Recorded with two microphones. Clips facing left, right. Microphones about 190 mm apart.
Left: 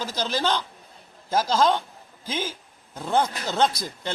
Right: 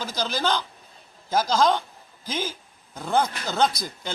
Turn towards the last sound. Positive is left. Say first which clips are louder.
# left 1 dB
turn(degrees=0)  # may be behind; listen again after turning